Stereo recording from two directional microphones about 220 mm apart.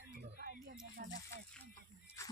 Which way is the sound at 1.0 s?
40° right (ahead or behind).